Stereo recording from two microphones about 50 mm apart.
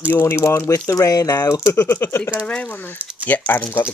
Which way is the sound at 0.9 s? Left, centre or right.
Left.